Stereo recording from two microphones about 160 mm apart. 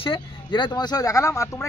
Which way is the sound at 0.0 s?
30° left (ahead or behind).